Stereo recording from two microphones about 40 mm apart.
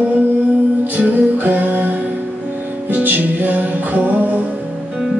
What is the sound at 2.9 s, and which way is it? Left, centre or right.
Music, right.